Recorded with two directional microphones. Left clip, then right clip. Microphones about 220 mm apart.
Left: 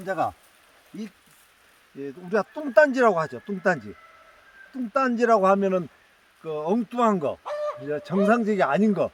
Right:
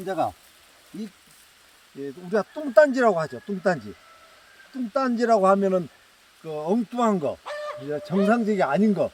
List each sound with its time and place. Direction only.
0.0 s speech: 10° left (ahead or behind)
2.0 s speech: centre (ahead or behind)
4.9 s speech: centre (ahead or behind)
7.4 s chicken: 40° left (ahead or behind)
7.9 s speech: centre (ahead or behind)